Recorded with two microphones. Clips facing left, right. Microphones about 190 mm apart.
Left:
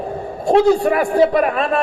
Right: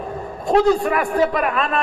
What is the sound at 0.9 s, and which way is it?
Speech, 30° left (ahead or behind).